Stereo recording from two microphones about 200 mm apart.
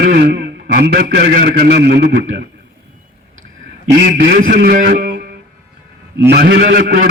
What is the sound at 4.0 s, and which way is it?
A man's voice, 50° right (ahead or behind).